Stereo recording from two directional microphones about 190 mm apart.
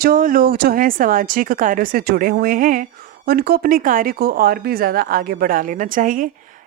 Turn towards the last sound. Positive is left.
turn(degrees=-45)  # may be behind; listen again after turning